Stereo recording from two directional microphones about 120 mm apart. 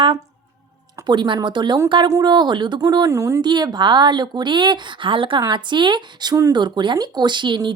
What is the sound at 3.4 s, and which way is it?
Speech, 40° right (ahead or behind).